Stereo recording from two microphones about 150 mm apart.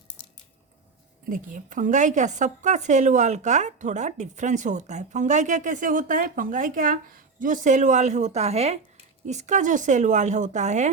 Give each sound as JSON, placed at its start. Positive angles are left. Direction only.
{"t": 1.3, "sound": "a woman's voice", "side_deg": -60}